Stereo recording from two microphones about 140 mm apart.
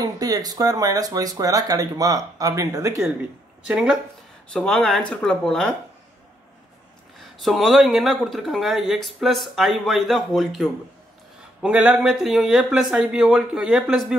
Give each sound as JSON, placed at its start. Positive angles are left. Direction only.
{"t": 0.0, "sound": "speech", "side_deg": -25}
{"t": 3.6, "sound": "speech", "side_deg": -5}
{"t": 7.2, "sound": "speech", "side_deg": 0}